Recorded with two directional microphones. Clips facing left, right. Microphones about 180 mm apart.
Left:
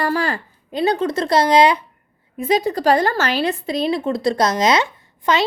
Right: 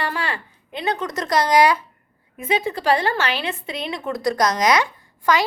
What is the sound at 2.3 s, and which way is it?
A woman's voice, 35° left (ahead or behind).